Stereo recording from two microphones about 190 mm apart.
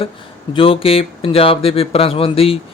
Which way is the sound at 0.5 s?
30° left (ahead or behind).